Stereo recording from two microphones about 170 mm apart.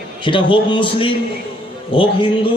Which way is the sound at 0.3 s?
30° left (ahead or behind).